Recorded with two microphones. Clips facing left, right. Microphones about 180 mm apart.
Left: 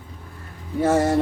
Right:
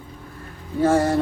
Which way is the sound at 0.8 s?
20° left (ahead or behind).